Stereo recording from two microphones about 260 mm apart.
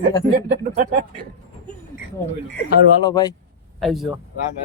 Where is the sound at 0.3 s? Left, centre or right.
Right.